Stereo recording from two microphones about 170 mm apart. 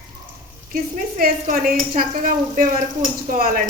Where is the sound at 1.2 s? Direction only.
55° right (ahead or behind).